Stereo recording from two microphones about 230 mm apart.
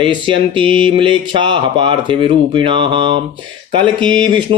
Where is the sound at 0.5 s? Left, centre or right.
Right.